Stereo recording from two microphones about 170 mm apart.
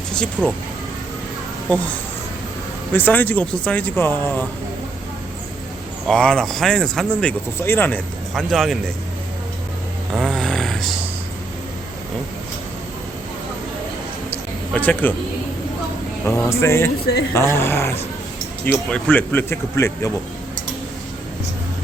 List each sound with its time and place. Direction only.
0.4 s speech: centre (ahead or behind)
2.9 s speech: 10° left (ahead or behind)
6.1 s speech: 5° left (ahead or behind)
10.1 s snoring: centre (ahead or behind)
14.7 s speech: 10° left (ahead or behind)
16.2 s speech: 15° left (ahead or behind)